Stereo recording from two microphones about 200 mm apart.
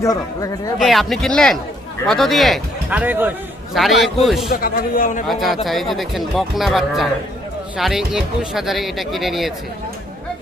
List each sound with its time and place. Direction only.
0.0 s speech: 15° left (ahead or behind)
0.8 s speech: centre (ahead or behind)
4.4 s a man's voice: 45° left (ahead or behind)
5.3 s speech: centre (ahead or behind)